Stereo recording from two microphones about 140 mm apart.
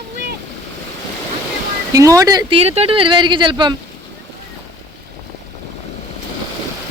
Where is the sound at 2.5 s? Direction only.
45° right (ahead or behind).